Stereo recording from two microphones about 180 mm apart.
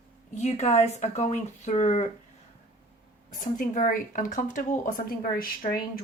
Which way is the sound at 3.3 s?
45° left (ahead or behind).